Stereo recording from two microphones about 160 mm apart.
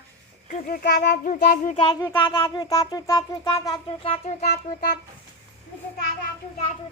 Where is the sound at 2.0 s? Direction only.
15° left (ahead or behind).